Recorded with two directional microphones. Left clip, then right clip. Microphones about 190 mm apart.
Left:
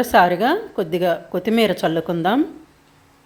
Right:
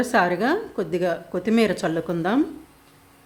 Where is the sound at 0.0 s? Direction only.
5° left (ahead or behind).